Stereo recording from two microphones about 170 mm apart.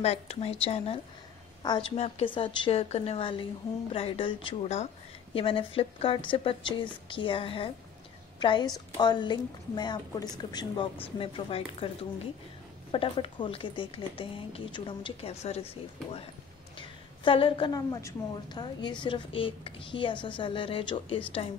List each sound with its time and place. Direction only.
0.0 s a woman's voice: 40° left (ahead or behind)